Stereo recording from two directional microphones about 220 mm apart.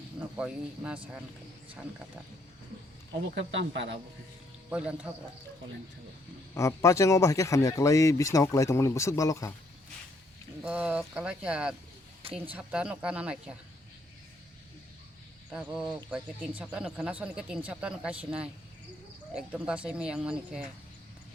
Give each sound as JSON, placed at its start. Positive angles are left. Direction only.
{"t": 0.3, "sound": "speech", "side_deg": -5}
{"t": 3.2, "sound": "speech", "side_deg": -50}
{"t": 4.7, "sound": "speech", "side_deg": -5}
{"t": 6.5, "sound": "speech", "side_deg": 15}
{"t": 10.6, "sound": "speech", "side_deg": -5}
{"t": 15.4, "sound": "speech", "side_deg": -5}